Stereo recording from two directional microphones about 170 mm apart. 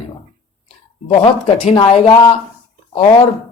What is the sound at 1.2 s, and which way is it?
Speech, 30° left (ahead or behind).